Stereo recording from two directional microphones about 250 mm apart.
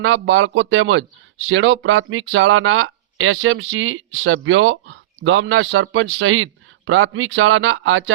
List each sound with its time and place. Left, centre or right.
0.0 s speech: right